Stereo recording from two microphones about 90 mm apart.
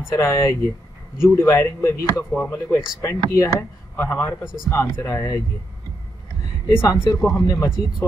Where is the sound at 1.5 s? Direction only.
30° left (ahead or behind).